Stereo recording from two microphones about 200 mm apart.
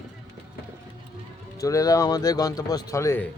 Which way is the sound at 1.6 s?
15° left (ahead or behind).